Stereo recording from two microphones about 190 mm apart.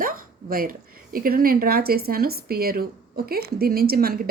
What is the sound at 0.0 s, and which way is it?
Speech, 50° right (ahead or behind).